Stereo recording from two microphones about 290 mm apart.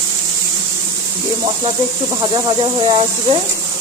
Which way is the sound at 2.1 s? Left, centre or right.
Centre.